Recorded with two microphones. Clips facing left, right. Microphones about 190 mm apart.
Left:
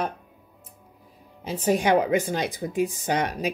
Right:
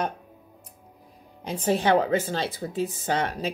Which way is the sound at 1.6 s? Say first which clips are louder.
Left 1 dB; 15° left (ahead or behind).